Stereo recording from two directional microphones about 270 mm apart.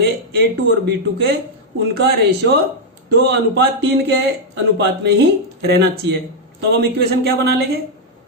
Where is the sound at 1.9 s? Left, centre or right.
Right.